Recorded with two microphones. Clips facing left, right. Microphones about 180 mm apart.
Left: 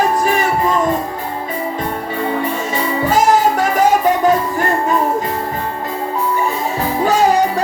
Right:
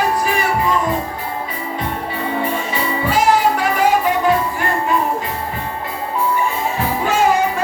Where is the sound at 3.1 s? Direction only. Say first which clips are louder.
Left 2 dB; 45° left (ahead or behind).